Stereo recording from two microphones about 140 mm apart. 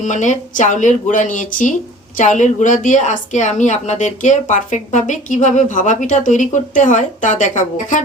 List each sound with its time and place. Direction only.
0.0 s speech: 60° left (ahead or behind)